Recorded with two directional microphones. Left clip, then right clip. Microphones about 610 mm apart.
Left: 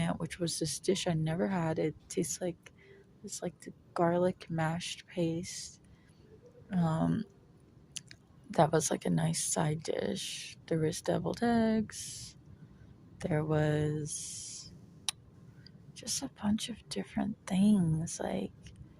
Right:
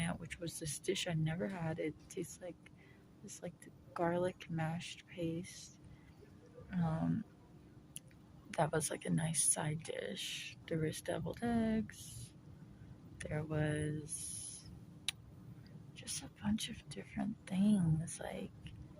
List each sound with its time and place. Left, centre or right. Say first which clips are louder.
0.0 s speech: left 8 dB; right
3.9 s speech: left 7 dB; right
6.7 s speech: left 8 dB; right
8.4 s speech: left 8 dB; right
13.1 s speech: left 9 dB; right
15.6 s speech: left 8 dB; right